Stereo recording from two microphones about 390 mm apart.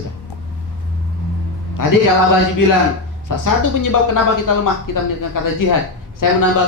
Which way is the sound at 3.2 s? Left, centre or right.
Left.